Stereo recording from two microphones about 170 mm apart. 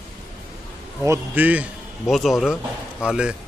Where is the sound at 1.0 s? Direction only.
15° right (ahead or behind).